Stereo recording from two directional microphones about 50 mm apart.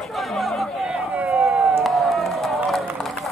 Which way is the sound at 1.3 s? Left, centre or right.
Right.